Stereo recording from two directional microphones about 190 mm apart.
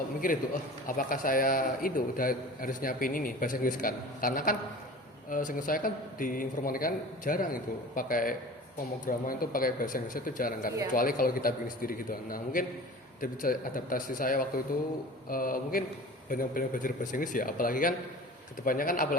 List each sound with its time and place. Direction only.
0.9 s a man's voice: 45° left (ahead or behind)